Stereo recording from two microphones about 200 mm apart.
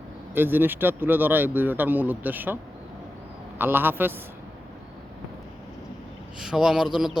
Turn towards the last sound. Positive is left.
turn(degrees=-5)  # may be behind; listen again after turning